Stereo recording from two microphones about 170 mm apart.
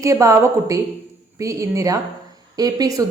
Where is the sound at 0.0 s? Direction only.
20° right (ahead or behind).